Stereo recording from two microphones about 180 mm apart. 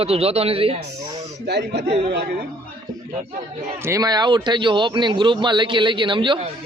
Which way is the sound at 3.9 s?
20° right (ahead or behind).